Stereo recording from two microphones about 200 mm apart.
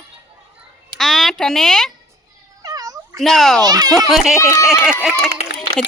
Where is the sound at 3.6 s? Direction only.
20° right (ahead or behind).